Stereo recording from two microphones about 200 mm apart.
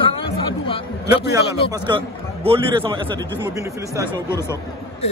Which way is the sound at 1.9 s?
25° right (ahead or behind).